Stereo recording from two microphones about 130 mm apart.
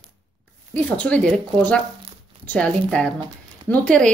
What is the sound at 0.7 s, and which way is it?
Speech, 10° left (ahead or behind).